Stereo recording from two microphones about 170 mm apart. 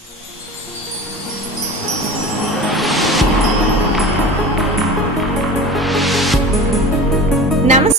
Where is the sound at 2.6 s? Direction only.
Centre (ahead or behind).